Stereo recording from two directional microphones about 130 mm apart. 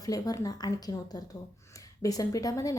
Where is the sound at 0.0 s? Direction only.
30° left (ahead or behind).